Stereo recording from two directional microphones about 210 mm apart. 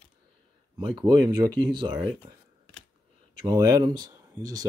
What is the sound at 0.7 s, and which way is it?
Speech, 20° right (ahead or behind).